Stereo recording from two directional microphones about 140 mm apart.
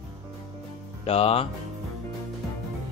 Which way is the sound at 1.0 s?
45° left (ahead or behind).